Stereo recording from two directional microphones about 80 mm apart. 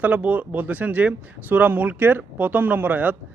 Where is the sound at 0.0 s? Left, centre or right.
Centre.